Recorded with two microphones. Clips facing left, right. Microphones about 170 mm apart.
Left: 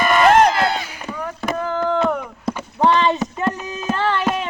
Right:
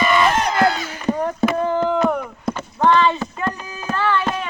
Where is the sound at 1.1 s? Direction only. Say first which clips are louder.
Right 9 dB; 40° right (ahead or behind).